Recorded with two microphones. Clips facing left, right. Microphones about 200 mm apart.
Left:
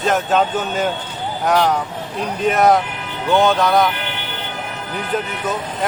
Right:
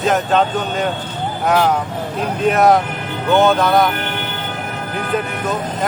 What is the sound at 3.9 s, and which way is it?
Vehicle, 50° right (ahead or behind).